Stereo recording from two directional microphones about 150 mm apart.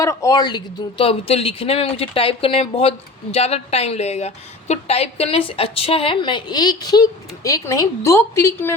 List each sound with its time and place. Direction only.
0.0 s a woman's voice: 20° left (ahead or behind)